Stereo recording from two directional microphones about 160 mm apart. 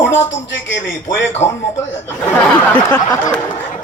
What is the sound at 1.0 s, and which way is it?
Speech, 15° left (ahead or behind).